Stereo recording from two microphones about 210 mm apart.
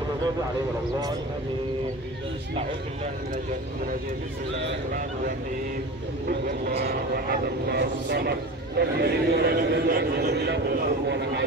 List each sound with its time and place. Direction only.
6.2 s a man's voice: 45° right (ahead or behind)